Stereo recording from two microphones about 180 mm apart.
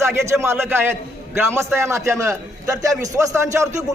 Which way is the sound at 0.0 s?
15° right (ahead or behind).